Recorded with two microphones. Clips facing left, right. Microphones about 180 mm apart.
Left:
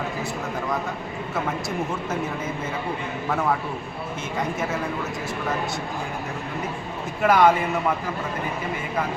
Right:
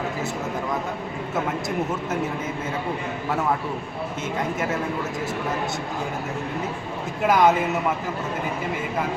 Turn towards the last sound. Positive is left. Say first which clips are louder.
# left 1 dB
turn(degrees=-20)  # may be behind; listen again after turning